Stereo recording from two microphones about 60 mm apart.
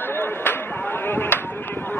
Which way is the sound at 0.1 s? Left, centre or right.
Left.